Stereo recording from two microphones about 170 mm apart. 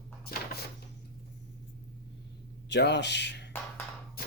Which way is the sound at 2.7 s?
90° left.